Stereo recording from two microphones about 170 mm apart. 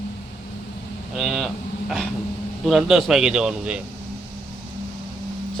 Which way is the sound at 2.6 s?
Centre (ahead or behind).